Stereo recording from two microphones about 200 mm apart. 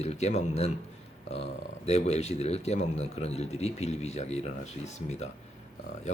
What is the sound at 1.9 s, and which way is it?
Speech, 35° left (ahead or behind).